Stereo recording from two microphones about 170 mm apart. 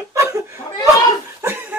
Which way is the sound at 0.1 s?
15° right (ahead or behind).